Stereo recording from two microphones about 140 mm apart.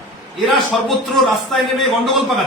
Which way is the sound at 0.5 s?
Centre (ahead or behind).